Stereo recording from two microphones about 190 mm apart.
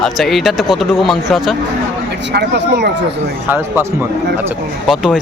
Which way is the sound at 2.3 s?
60° right (ahead or behind).